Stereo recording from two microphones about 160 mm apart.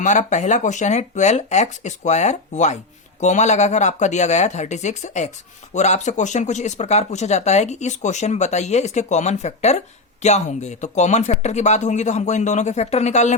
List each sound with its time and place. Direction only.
0.0 s speech: 50° left (ahead or behind)